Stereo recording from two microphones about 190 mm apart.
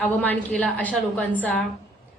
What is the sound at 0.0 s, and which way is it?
A woman's voice, 5° left (ahead or behind).